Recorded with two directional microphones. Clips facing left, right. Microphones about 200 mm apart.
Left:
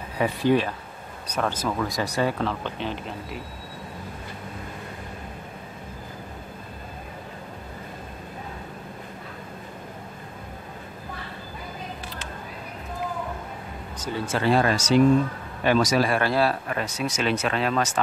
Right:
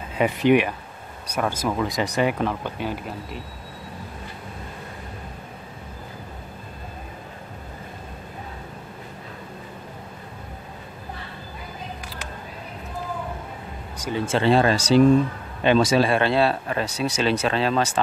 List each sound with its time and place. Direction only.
0.2 s speech: 20° right (ahead or behind)
13.9 s a sound: 10° right (ahead or behind)
14.2 s speech: 25° right (ahead or behind)